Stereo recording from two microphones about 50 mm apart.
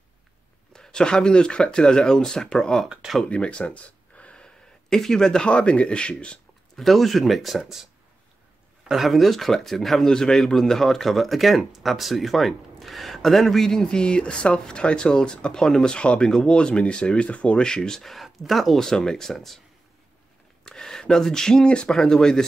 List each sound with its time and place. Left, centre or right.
0.7 s speech: centre
3.3 s speech: left
6.8 s speech: centre
8.8 s speech: centre
10.0 s speech: centre
20.6 s speech: centre